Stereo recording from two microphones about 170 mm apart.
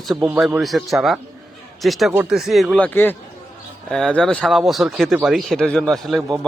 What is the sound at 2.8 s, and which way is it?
A man's voice, 10° left (ahead or behind).